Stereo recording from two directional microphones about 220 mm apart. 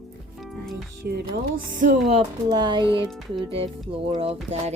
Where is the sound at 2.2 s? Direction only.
20° right (ahead or behind).